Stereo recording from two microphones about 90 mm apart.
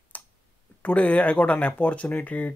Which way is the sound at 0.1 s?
20° left (ahead or behind).